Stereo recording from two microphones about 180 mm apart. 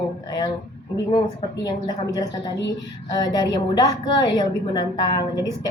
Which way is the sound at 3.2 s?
20° left (ahead or behind).